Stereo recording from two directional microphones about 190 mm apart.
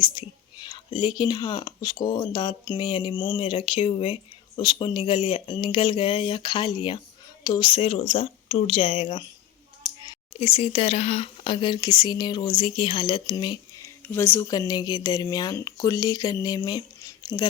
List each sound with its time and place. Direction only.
0.0 s speech: 25° left (ahead or behind)
14.1 s speech: 15° left (ahead or behind)